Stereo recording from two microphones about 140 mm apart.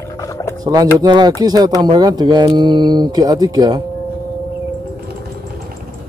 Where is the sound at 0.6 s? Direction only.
25° right (ahead or behind).